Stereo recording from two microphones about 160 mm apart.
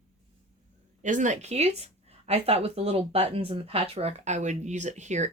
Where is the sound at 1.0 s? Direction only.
50° right (ahead or behind).